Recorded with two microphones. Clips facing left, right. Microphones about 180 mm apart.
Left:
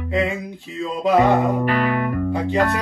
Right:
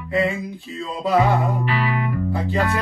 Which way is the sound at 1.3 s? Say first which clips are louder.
Left 4 dB; 55° left (ahead or behind).